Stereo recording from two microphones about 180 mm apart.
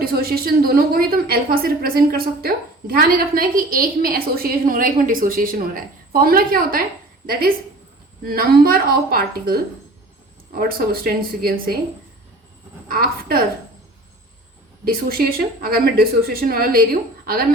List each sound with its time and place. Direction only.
0.0 s a woman's voice: 55° right (ahead or behind)
8.2 s a woman's voice: 55° right (ahead or behind)
12.9 s a woman's voice: 55° right (ahead or behind)
14.8 s a woman's voice: 55° right (ahead or behind)